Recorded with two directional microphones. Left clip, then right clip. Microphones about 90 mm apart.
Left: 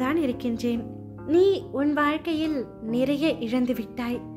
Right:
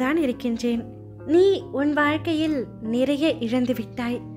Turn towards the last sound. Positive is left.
turn(degrees=-40)  # may be behind; listen again after turning